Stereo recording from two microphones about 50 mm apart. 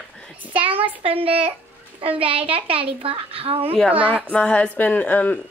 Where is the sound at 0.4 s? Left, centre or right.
Right.